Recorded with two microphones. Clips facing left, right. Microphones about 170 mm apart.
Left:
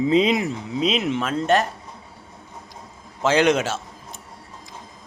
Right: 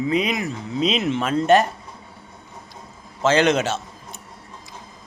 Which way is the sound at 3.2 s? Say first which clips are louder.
Even; 10° left (ahead or behind).